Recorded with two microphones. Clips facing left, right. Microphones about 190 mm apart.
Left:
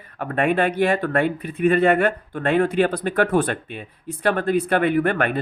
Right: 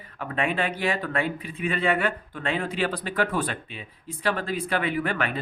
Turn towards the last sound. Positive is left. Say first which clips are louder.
# left 7 dB
turn(degrees=55)  # may be behind; listen again after turning